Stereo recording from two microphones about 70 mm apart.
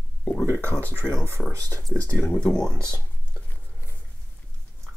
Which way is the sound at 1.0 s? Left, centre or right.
Right.